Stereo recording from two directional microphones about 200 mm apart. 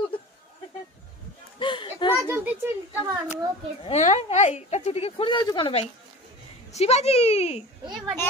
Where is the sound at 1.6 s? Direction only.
25° left (ahead or behind).